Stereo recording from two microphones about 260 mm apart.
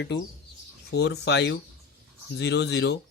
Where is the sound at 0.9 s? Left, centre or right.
Left.